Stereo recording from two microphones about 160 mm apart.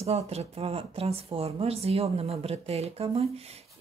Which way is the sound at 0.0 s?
40° right (ahead or behind).